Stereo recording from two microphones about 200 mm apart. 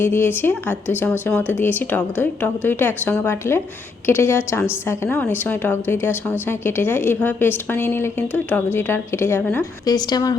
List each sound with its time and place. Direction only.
0.0 s a woman's voice: 10° left (ahead or behind)